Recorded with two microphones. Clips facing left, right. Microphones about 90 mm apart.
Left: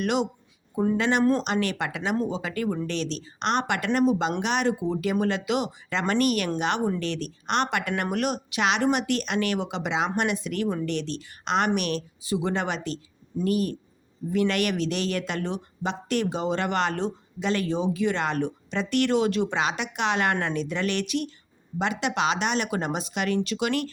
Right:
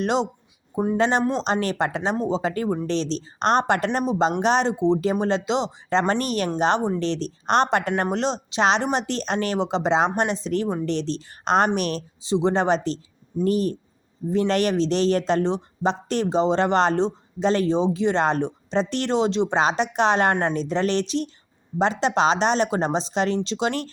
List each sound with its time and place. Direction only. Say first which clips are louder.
0.0 s a man's voice: right 3 dB; 30° right (ahead or behind)
1.2 s speech: left 2 dB; 20° right (ahead or behind)
1.5 s a man's voice: right 4 dB; 35° right (ahead or behind)